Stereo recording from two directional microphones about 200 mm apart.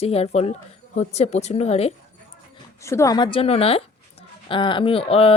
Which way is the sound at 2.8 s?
15° left (ahead or behind).